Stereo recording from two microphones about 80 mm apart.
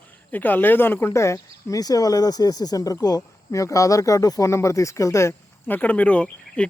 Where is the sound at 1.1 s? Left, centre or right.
Left.